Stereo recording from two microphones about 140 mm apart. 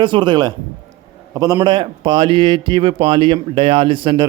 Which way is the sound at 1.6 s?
35° right (ahead or behind).